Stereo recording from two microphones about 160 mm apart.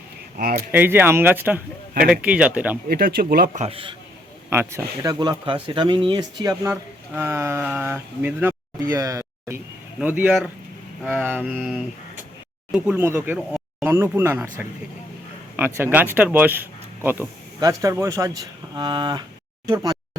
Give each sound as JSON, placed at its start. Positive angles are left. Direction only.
{"t": 0.3, "sound": "speech", "side_deg": -65}
{"t": 0.7, "sound": "speech", "side_deg": -10}
{"t": 2.9, "sound": "speech", "side_deg": -70}
{"t": 3.5, "sound": "a man's voice", "side_deg": -40}
{"t": 4.4, "sound": "speech", "side_deg": -15}
{"t": 6.7, "sound": "speech", "side_deg": -15}
{"t": 12.7, "sound": "speech", "side_deg": -10}
{"t": 15.5, "sound": "speech", "side_deg": -15}